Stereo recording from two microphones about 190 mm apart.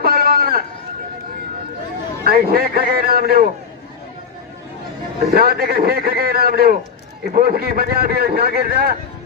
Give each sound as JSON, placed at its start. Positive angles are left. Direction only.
{"t": 0.0, "sound": "a sound", "side_deg": -50}
{"t": 2.2, "sound": "a man's voice", "side_deg": -55}
{"t": 5.2, "sound": "a man's voice", "side_deg": -50}